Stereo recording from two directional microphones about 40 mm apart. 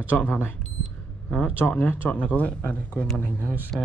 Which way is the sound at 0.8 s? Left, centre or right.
Left.